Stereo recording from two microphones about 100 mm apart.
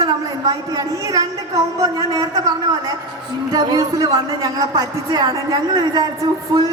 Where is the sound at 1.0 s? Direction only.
35° right (ahead or behind).